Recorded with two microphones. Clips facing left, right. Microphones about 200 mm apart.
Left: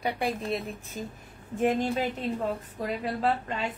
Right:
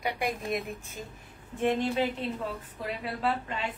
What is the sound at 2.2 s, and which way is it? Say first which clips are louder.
A woman's voice: left 4 dB; 40° left (ahead or behind).